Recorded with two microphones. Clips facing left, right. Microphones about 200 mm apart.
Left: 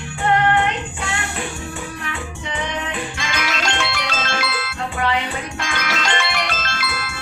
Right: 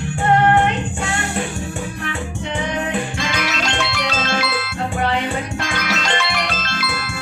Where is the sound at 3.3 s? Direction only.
50° left (ahead or behind).